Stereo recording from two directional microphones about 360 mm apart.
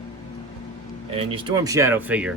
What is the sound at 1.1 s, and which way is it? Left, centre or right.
Speech, centre.